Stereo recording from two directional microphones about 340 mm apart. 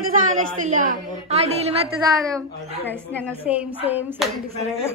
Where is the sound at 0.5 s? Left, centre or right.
Right.